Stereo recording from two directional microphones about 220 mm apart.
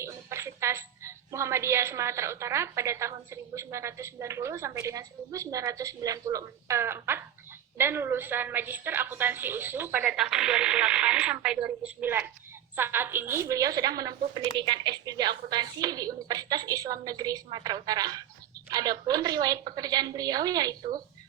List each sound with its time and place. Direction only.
0.0 s a woman's voice: 10° right (ahead or behind)